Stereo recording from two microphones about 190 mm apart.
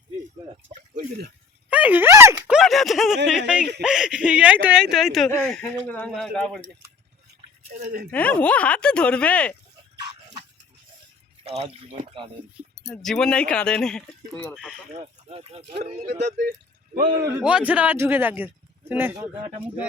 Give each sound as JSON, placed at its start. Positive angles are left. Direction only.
{"t": 1.7, "sound": "speech", "side_deg": -10}
{"t": 2.6, "sound": "speech", "side_deg": 0}
{"t": 7.7, "sound": "speech", "side_deg": -40}
{"t": 8.1, "sound": "speech", "side_deg": 5}
{"t": 11.4, "sound": "speech", "side_deg": -35}
{"t": 12.9, "sound": "speech", "side_deg": 0}
{"t": 14.9, "sound": "speech", "side_deg": -30}
{"t": 17.2, "sound": "a man's voice", "side_deg": -5}